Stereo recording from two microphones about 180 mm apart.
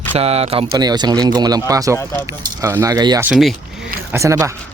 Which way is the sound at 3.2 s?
5° right (ahead or behind).